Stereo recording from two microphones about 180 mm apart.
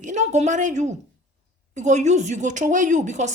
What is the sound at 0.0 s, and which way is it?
A woman's voice, 40° right (ahead or behind).